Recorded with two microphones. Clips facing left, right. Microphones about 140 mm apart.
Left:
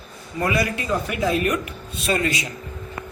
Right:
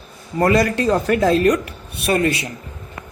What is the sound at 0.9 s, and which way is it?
Speech, 70° right (ahead or behind).